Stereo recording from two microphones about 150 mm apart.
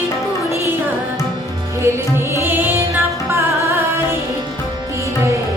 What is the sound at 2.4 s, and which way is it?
Music, 15° right (ahead or behind).